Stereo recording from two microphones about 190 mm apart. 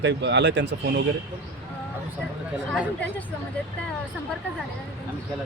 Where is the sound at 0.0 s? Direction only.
65° right (ahead or behind).